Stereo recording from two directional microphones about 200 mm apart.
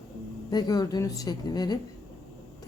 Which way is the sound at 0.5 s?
20° left (ahead or behind).